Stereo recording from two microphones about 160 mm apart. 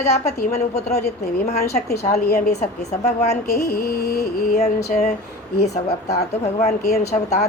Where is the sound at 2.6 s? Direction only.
45° left (ahead or behind).